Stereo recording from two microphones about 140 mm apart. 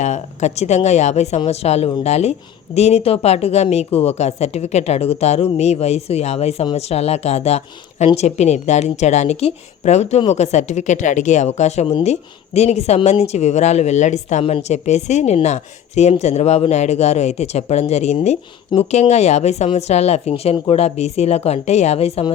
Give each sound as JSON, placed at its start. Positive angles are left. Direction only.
{"t": 0.0, "sound": "speech", "side_deg": 55}